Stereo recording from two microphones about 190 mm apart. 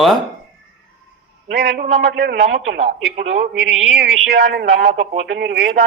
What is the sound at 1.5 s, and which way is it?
Speech, 65° right (ahead or behind).